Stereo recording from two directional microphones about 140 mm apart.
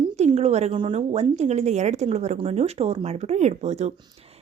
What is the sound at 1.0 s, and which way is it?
A woman's voice, 50° right (ahead or behind).